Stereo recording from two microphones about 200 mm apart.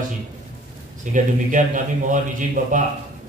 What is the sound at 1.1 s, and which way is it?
A man's voice, 40° right (ahead or behind).